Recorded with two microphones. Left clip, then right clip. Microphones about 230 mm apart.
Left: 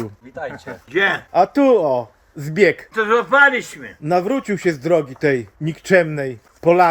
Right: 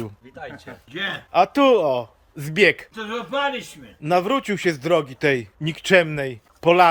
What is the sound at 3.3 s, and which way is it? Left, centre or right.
Speech, centre.